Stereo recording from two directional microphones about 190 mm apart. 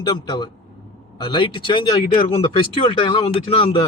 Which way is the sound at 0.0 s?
20° left (ahead or behind).